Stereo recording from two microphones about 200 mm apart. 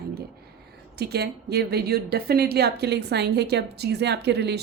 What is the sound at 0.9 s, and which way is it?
A woman's voice, 55° right (ahead or behind).